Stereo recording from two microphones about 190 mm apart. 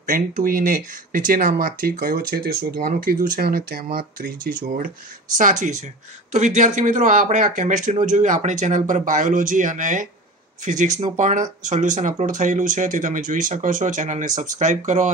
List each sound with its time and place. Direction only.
0.0 s speech: 50° right (ahead or behind)